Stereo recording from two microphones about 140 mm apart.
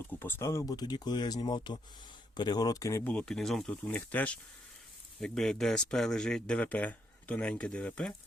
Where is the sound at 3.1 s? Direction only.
5° left (ahead or behind).